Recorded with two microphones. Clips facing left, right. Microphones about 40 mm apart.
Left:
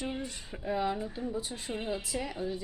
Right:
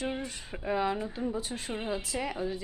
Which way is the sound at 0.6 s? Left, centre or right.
Right.